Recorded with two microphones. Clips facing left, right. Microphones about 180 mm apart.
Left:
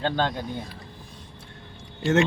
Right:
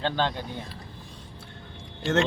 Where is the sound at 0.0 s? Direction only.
45° left (ahead or behind).